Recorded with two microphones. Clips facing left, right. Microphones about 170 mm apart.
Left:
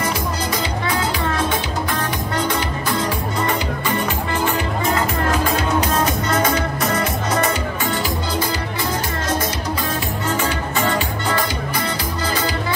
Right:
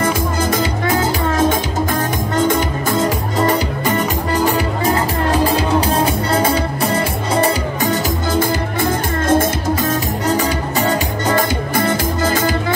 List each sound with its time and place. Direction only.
0.0 s music: 50° right (ahead or behind)
10.2 s music: 40° right (ahead or behind)